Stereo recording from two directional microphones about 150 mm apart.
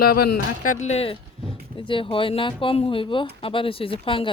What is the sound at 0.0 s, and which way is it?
Speech, 85° left.